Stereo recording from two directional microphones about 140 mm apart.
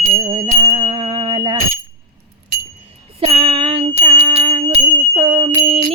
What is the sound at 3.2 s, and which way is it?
Jingle bell, 40° right (ahead or behind).